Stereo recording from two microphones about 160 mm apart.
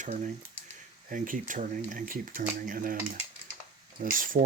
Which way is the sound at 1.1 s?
55° right (ahead or behind).